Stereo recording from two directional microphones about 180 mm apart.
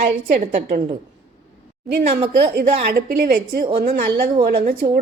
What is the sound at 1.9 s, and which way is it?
A woman's voice, 65° right (ahead or behind).